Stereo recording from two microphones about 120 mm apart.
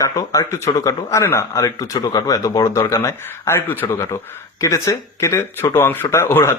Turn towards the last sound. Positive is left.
turn(degrees=20)  # may be behind; listen again after turning